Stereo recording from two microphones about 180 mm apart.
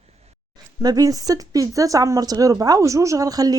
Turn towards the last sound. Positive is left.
turn(degrees=-20)  # may be behind; listen again after turning